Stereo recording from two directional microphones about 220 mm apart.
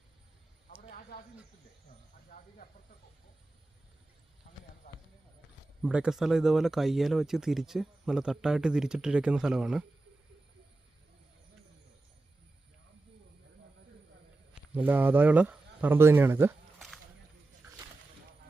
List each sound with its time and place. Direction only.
0.8 s a sound: 40° left (ahead or behind)
5.8 s speech: 5° right (ahead or behind)
14.5 s speech: 5° right (ahead or behind)